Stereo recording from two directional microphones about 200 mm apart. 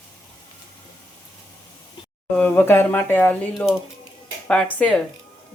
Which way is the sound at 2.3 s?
10° left (ahead or behind).